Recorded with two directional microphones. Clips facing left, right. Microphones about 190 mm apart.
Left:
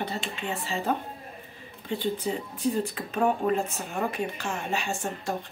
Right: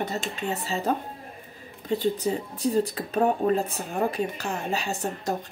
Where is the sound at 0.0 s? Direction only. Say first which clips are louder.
Right 3 dB; 45° right (ahead or behind).